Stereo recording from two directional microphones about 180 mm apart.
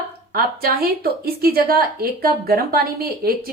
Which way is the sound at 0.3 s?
55° right (ahead or behind).